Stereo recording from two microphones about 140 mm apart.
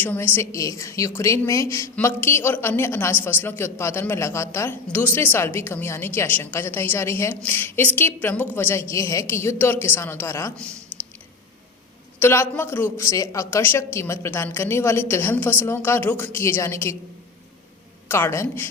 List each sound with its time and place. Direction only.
0.0 s a woman's voice: 15° left (ahead or behind)
12.2 s a woman's voice: 15° left (ahead or behind)
18.1 s a woman's voice: 15° left (ahead or behind)